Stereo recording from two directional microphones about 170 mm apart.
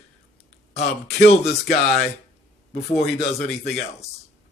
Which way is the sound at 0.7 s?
40° left (ahead or behind).